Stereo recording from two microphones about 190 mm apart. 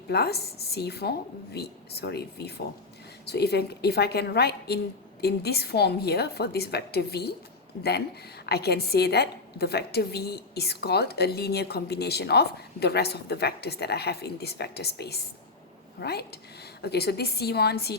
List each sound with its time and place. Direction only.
0.1 s a woman's voice: 55° left (ahead or behind)